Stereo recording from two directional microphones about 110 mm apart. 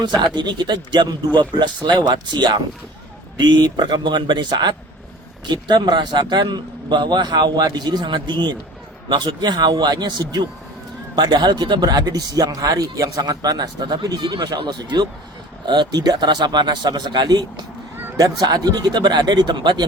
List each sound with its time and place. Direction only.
0.3 s speech: 45° right (ahead or behind)